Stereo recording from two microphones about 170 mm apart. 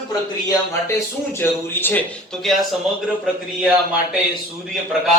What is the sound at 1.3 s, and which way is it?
A man's voice, 10° left (ahead or behind).